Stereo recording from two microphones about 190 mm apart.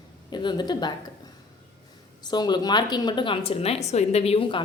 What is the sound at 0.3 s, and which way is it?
Speech, 25° left (ahead or behind).